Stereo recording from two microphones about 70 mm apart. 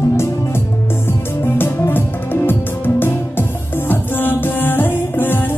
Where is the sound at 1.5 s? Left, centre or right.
Left.